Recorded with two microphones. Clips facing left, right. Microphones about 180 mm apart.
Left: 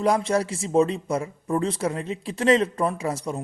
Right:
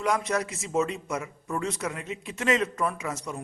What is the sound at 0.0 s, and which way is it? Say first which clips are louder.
Speech: left 5 dB; 30° left (ahead or behind).